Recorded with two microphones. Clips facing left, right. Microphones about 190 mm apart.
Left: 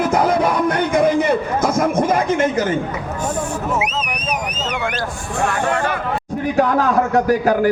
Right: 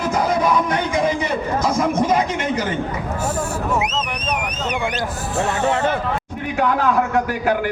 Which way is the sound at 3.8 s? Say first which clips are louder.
Even; 10° left (ahead or behind).